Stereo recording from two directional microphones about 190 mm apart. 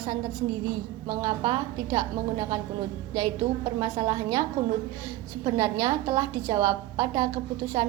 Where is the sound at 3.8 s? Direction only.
25° right (ahead or behind).